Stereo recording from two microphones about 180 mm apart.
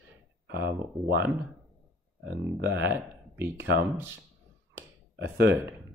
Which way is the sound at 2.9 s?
15° right (ahead or behind).